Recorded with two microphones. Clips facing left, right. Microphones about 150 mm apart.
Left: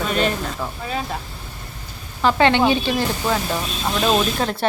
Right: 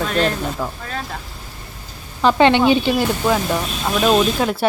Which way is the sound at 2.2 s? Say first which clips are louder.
Right 3 dB; 20° right (ahead or behind).